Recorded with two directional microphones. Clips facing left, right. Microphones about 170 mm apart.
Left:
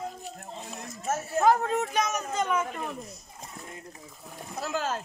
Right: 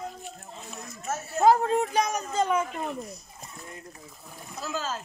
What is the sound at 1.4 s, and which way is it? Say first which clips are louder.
Speech: right 3 dB; 30° right (ahead or behind).